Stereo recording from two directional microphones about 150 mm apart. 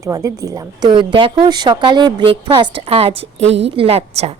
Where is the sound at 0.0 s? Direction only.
20° right (ahead or behind).